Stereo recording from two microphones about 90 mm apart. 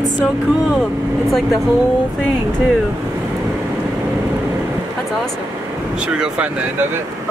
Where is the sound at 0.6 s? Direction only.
Centre (ahead or behind).